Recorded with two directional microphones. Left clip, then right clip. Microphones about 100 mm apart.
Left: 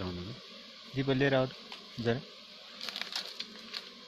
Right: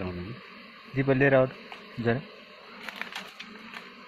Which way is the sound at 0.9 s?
25° left (ahead or behind).